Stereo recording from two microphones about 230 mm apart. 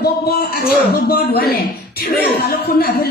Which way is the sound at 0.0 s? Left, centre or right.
Left.